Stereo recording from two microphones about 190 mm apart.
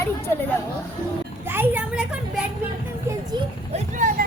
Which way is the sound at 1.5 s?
10° right (ahead or behind).